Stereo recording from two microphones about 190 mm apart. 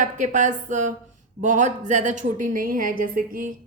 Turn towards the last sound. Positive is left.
turn(degrees=-45)  # may be behind; listen again after turning